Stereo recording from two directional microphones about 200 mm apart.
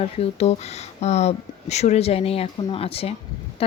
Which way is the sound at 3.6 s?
30° left (ahead or behind).